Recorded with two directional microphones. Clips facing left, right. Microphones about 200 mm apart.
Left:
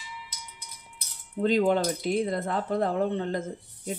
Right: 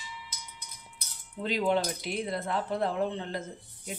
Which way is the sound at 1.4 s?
45° left (ahead or behind).